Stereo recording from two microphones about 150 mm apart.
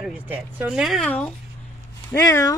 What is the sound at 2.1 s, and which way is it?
Speech, 20° left (ahead or behind).